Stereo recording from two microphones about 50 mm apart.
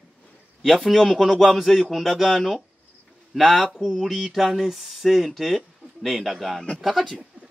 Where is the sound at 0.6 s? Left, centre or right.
Centre.